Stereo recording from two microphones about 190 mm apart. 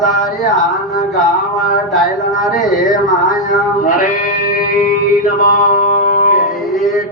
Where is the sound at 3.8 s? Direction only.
45° left (ahead or behind).